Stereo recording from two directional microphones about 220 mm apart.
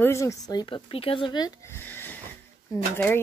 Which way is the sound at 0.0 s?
15° left (ahead or behind).